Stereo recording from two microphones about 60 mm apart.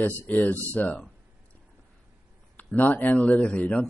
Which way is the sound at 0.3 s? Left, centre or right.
Left.